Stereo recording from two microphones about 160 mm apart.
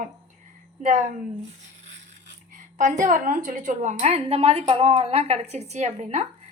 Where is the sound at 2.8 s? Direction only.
55° right (ahead or behind).